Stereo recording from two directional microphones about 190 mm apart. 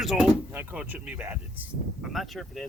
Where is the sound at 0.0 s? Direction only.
Centre (ahead or behind).